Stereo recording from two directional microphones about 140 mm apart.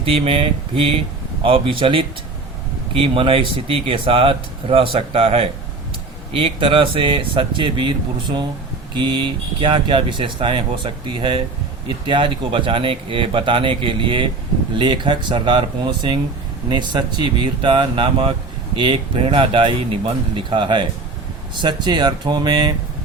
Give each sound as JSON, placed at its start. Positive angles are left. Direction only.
{"t": 0.0, "sound": "speech", "side_deg": -40}